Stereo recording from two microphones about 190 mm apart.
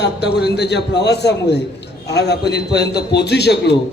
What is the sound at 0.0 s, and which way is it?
A man's voice, 60° left (ahead or behind).